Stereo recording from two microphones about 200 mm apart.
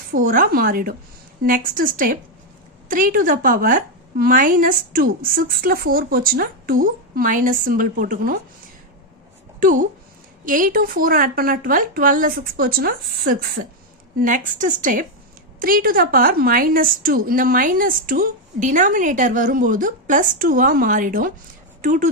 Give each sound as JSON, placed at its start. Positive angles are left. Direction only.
{"t": 0.1, "sound": "a woman's voice", "side_deg": -45}
{"t": 9.6, "sound": "a woman's voice", "side_deg": -45}